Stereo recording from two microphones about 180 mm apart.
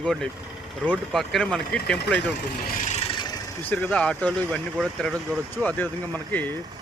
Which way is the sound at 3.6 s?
10° left (ahead or behind).